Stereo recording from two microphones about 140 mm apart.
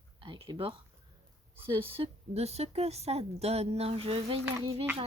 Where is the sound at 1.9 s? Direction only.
45° right (ahead or behind).